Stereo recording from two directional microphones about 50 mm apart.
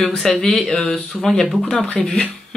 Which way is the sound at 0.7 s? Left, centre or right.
Centre.